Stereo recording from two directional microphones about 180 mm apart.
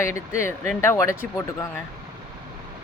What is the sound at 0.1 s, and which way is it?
Speech, 15° left (ahead or behind).